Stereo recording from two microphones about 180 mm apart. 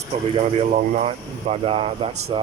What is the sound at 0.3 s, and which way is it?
Speech, 40° right (ahead or behind).